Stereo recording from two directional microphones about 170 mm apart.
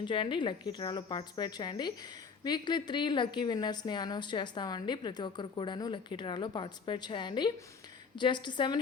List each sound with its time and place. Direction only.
0.0 s a woman's voice: 30° left (ahead or behind)